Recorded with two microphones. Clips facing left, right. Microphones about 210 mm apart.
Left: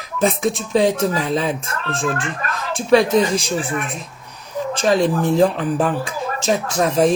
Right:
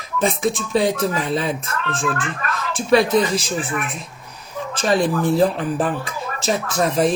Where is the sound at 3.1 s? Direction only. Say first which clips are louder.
Left 2 dB; 35° left (ahead or behind).